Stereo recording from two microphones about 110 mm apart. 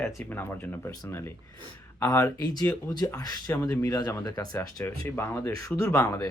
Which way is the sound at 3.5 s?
25° left (ahead or behind).